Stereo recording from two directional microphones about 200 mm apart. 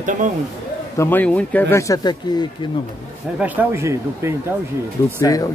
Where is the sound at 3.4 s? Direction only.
10° right (ahead or behind).